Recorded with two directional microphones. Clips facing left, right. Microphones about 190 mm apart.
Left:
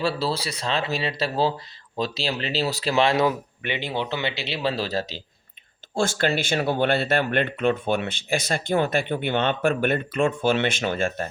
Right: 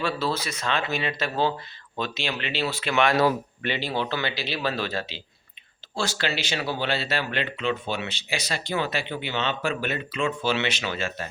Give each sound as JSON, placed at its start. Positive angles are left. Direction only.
{"t": 0.0, "sound": "speech", "side_deg": 35}
{"t": 3.2, "sound": "speech", "side_deg": 15}
{"t": 5.9, "sound": "speech", "side_deg": 50}